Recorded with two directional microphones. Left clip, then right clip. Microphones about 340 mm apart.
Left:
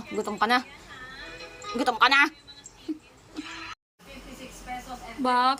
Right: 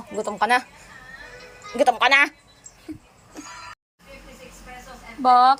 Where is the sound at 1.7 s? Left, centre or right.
Centre.